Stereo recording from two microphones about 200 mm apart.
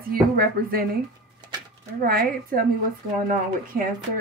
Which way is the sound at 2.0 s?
45° right (ahead or behind).